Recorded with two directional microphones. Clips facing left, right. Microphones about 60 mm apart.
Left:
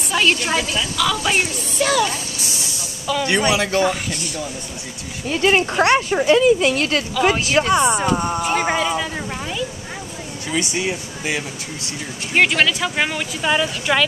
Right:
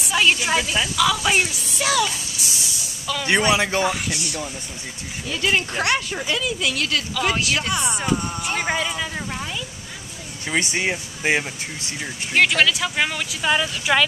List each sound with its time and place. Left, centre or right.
0.1 s a man's voice: centre
2.0 s a sound: left
3.3 s a man's voice: centre
3.8 s speech: centre
5.3 s speech: left
7.2 s speech: centre
10.5 s speech: right
12.4 s speech: centre